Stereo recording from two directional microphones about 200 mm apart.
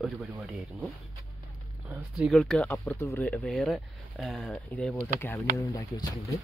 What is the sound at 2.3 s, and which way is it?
Speech, 5° left (ahead or behind).